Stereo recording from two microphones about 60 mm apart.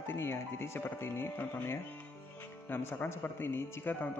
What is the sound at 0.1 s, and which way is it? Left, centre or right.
A man's voice, left.